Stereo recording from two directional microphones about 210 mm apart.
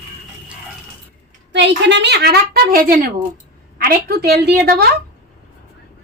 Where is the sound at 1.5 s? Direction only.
55° right (ahead or behind).